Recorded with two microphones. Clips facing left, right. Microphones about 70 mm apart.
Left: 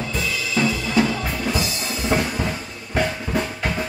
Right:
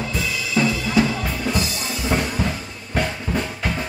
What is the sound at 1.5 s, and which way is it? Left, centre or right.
Drum kit, centre.